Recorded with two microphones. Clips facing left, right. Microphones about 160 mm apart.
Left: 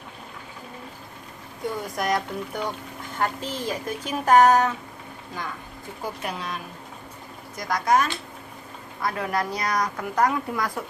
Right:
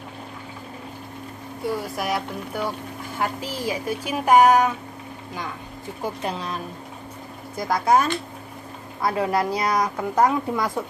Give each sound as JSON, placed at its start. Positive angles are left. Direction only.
{"t": 1.6, "sound": "speech", "side_deg": -5}
{"t": 6.2, "sound": "speech", "side_deg": -30}